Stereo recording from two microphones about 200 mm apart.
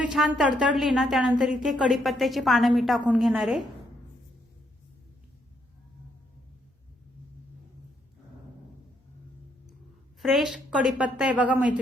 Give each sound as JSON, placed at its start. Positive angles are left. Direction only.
{"t": 0.0, "sound": "a woman's voice", "side_deg": 0}
{"t": 10.2, "sound": "a woman's voice", "side_deg": 0}